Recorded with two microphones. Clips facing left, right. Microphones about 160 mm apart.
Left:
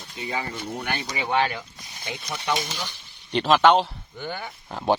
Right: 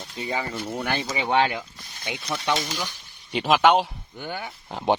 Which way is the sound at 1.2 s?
20° right (ahead or behind).